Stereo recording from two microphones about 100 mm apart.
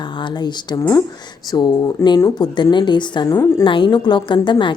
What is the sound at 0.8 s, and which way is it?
Speech, 25° left (ahead or behind).